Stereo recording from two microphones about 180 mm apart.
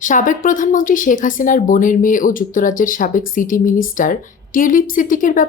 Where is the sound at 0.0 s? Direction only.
45° left (ahead or behind).